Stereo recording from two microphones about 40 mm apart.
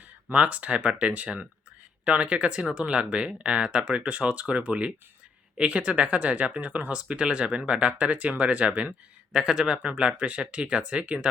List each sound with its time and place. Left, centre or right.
0.3 s speech: right
7.1 s speech: right
9.3 s speech: centre